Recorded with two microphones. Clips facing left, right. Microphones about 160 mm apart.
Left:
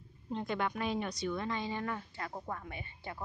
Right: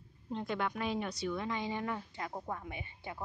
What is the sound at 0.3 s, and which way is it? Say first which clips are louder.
A woman's voice: left 1 dB; centre (ahead or behind).